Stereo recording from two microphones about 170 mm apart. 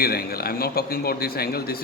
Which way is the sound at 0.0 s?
65° left (ahead or behind).